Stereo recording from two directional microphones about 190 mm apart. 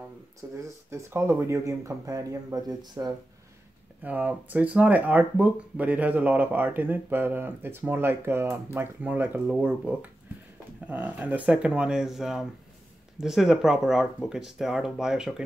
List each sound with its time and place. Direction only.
0.6 s speech: 15° right (ahead or behind)
4.0 s speech: 10° right (ahead or behind)